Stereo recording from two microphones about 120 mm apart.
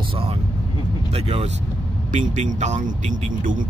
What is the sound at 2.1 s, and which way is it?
Speech, 80° right.